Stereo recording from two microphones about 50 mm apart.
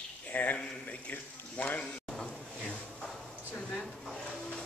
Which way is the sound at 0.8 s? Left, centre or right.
Left.